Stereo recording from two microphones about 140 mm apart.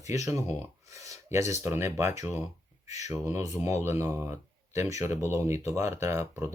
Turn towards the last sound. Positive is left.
turn(degrees=-20)  # may be behind; listen again after turning